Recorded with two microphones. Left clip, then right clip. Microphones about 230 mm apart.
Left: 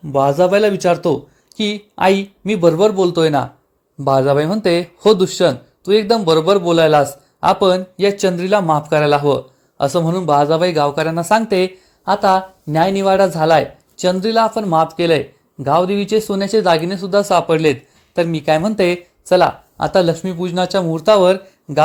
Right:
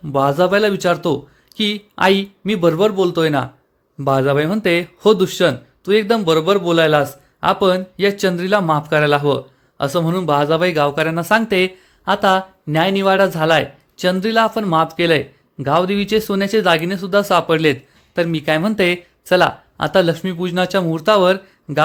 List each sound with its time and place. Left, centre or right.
0.1 s speech: centre
20.6 s speech: right
20.9 s speech: centre